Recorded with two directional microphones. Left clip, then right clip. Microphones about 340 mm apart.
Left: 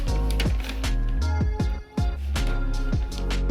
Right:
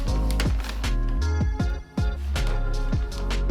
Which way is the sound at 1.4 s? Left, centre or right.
Centre.